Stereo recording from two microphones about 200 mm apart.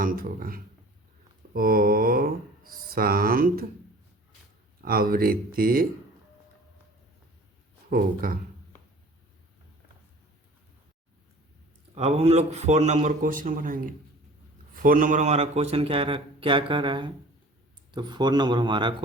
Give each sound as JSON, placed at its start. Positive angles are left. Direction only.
{"t": 0.0, "sound": "speech", "side_deg": -45}
{"t": 4.8, "sound": "speech", "side_deg": -45}
{"t": 7.9, "sound": "speech", "side_deg": -50}
{"t": 11.9, "sound": "a man's voice", "side_deg": -30}